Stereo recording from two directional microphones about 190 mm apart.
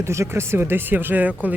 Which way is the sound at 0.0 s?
15° right (ahead or behind).